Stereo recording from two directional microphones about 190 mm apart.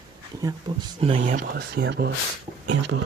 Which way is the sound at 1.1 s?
45° right (ahead or behind).